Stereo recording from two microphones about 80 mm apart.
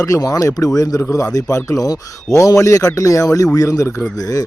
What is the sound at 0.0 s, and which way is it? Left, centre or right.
Speech, left.